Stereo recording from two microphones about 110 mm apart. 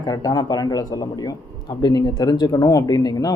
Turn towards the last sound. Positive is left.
turn(degrees=35)  # may be behind; listen again after turning